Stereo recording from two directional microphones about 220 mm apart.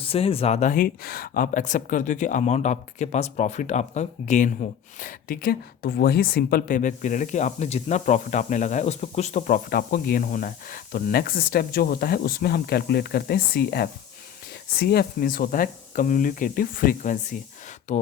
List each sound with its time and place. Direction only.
0.0 s speech: 25° left (ahead or behind)